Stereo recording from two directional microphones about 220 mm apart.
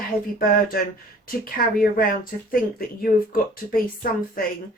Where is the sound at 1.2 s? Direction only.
40° left (ahead or behind).